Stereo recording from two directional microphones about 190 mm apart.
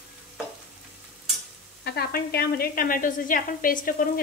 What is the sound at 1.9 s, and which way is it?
A woman's voice, 55° left (ahead or behind).